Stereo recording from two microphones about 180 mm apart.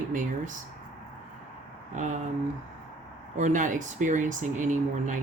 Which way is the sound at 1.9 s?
45° right (ahead or behind).